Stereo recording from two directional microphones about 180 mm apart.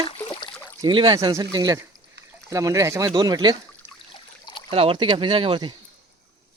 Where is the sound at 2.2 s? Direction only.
70° right (ahead or behind).